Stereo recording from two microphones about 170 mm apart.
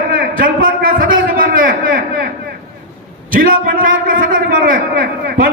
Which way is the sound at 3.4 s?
55° right (ahead or behind).